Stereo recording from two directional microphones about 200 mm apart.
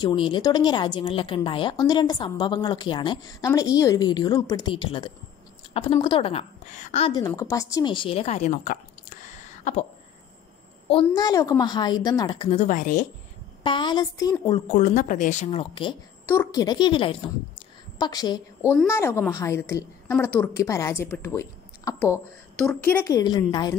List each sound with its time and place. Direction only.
0.0 s a woman's voice: 25° left (ahead or behind)
7.2 s speech: 20° left (ahead or behind); by 8.7 s 35° left (ahead or behind)
10.9 s speech: 25° left (ahead or behind); by 13.0 s 40° left (ahead or behind)
13.6 s speech: 25° left (ahead or behind)
14.7 s a woman's voice: 40° left (ahead or behind); by 23.8 s 20° left (ahead or behind)